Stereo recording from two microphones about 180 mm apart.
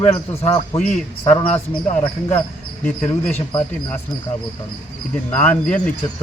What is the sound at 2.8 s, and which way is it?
Speech, 10° left (ahead or behind).